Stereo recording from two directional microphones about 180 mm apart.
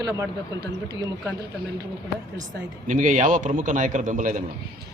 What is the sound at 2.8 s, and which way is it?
A man's voice, 45° right (ahead or behind).